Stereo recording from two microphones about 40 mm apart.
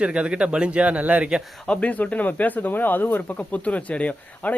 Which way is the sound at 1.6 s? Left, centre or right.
Left.